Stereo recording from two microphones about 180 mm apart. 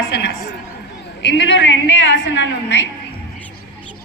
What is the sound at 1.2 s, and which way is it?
A woman's voice, 85° left.